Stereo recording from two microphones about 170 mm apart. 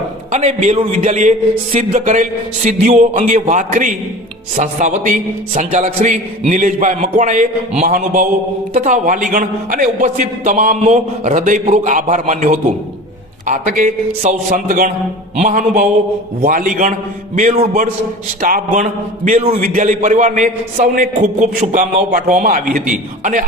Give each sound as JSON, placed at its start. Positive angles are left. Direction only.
{"t": 0.3, "sound": "a man's voice", "side_deg": -45}
{"t": 8.7, "sound": "a man's voice", "side_deg": -40}